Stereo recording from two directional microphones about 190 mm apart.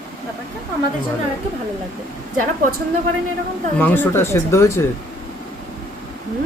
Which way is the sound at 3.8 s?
10° left (ahead or behind).